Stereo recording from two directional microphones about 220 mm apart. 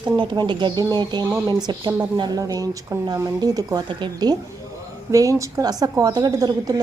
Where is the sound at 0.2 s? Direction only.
20° right (ahead or behind).